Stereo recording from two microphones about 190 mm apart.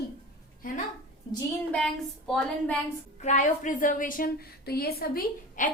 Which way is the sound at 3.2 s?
40° left (ahead or behind).